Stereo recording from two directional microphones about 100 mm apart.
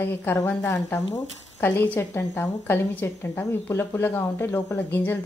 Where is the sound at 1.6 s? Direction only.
20° left (ahead or behind).